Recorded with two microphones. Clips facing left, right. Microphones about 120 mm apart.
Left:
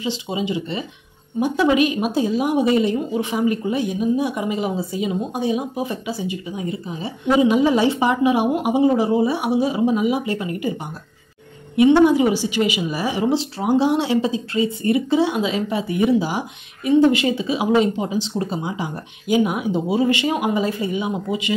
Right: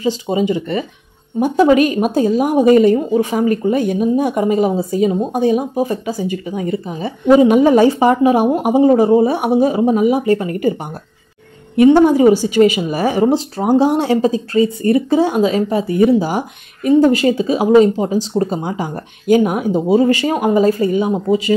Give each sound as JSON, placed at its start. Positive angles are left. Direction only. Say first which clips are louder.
{"t": 0.0, "sound": "a woman's voice", "louder": "right 8 dB", "side_deg": -45}